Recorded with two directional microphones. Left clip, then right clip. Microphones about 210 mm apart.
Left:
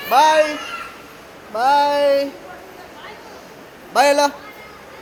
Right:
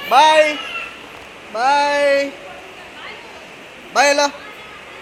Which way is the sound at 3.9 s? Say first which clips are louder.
Even; 10° left (ahead or behind).